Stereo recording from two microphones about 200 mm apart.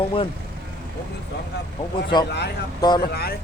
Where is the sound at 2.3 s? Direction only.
55° left (ahead or behind).